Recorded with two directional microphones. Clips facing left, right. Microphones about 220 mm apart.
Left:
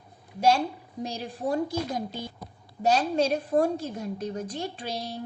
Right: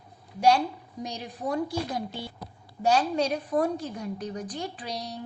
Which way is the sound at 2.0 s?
45° left (ahead or behind).